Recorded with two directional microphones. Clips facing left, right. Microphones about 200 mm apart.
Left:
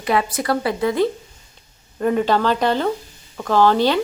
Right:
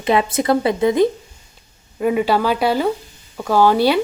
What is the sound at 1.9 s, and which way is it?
A woman's voice, 10° right (ahead or behind).